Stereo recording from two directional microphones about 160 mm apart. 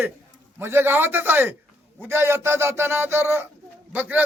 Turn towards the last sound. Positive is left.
turn(degrees=-10)  # may be behind; listen again after turning